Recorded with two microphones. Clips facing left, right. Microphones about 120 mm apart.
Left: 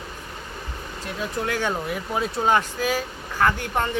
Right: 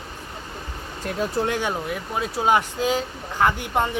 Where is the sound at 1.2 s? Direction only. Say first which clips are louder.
Right 4 dB; 30° right (ahead or behind).